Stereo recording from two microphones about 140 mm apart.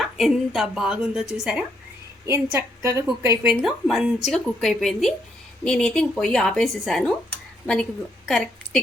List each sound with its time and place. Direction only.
0.0 s speech: centre (ahead or behind)
2.2 s a woman's voice: 20° right (ahead or behind)
3.4 s speech: 5° right (ahead or behind)
8.3 s a woman's voice: centre (ahead or behind)